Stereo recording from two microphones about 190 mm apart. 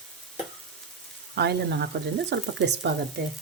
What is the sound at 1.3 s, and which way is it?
Speech, 60° right (ahead or behind).